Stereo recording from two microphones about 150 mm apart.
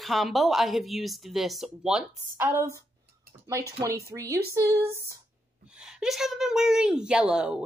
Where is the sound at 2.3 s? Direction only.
15° right (ahead or behind).